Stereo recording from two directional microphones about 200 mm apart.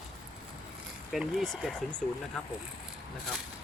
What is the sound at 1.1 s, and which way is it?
Speech, centre (ahead or behind).